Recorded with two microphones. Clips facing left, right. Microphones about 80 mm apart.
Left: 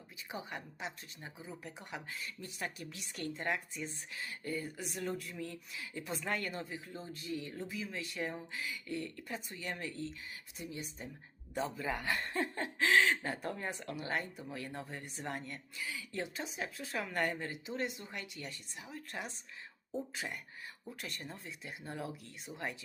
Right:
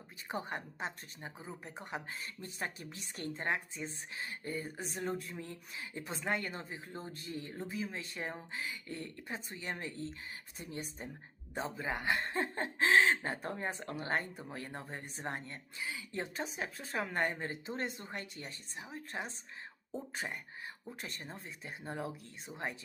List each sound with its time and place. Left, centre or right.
0.3 s speech: right
11.5 s speech: right
21.0 s speech: right